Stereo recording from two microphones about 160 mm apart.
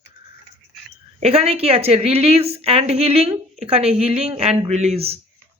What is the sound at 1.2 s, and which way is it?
Speech, 40° right (ahead or behind).